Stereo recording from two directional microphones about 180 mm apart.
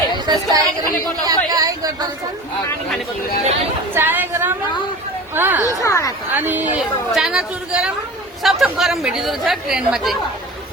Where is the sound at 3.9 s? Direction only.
10° right (ahead or behind).